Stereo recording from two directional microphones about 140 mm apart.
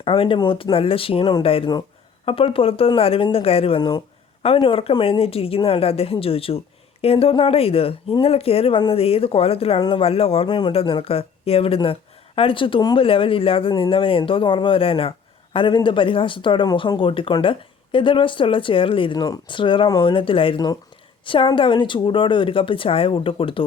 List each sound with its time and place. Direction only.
0.0 s a woman's voice: 40° left (ahead or behind)